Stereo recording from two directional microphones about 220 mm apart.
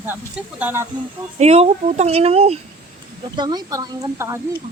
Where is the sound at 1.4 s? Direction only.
30° right (ahead or behind).